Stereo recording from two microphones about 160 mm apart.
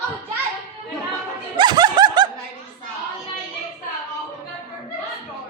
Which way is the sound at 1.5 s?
25° right (ahead or behind).